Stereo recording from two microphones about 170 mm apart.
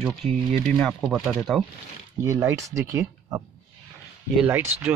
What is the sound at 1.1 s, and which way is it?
Speech, centre (ahead or behind).